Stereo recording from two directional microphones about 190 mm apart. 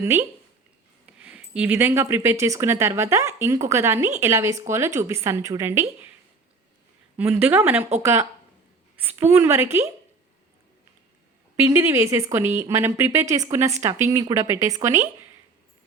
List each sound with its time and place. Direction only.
0.0 s speech: 15° right (ahead or behind)
7.2 s speech: 10° right (ahead or behind)
11.5 s speech: 10° right (ahead or behind)